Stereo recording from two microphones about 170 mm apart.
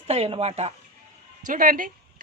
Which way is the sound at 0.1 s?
35° right (ahead or behind).